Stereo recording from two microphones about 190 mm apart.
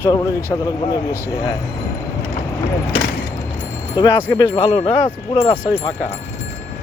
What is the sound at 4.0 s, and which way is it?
Speech, 25° left (ahead or behind).